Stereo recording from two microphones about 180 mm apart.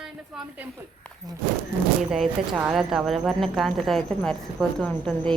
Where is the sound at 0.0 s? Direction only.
5° right (ahead or behind).